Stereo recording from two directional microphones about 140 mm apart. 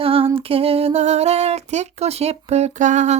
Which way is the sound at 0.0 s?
40° right (ahead or behind).